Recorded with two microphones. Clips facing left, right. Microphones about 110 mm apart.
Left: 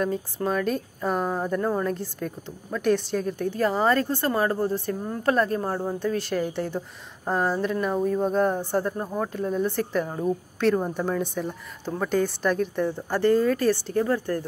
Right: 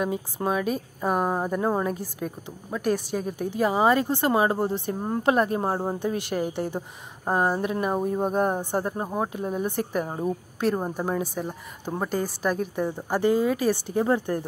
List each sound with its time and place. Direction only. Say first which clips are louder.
0.0 s a woman's voice: left 1 dB; 10° right (ahead or behind)